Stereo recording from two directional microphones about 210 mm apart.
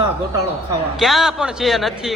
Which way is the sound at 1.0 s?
Centre (ahead or behind).